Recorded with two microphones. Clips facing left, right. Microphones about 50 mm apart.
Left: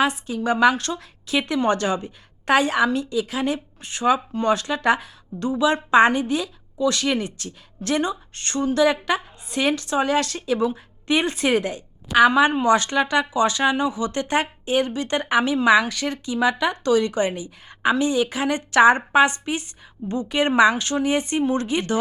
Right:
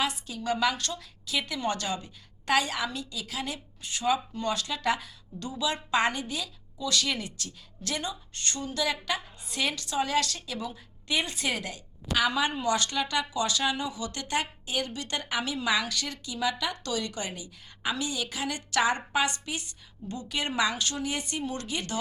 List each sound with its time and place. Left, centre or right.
0.0 s speech: left